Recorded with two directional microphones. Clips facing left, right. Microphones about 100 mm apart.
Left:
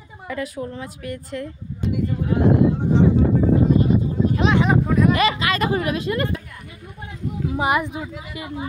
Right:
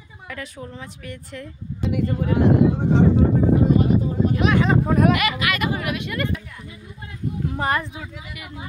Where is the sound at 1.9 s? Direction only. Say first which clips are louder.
Right 1 dB; 90° right.